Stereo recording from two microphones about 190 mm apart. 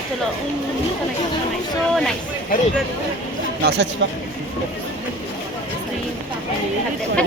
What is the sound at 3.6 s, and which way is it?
Speech, 60° right (ahead or behind).